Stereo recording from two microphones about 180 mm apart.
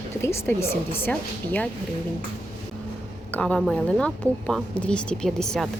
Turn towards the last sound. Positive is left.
turn(degrees=5)  # may be behind; listen again after turning